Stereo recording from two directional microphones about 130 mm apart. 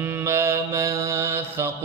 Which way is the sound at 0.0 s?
20° right (ahead or behind).